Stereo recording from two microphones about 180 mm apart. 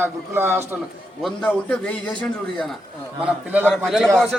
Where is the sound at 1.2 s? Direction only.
5° left (ahead or behind).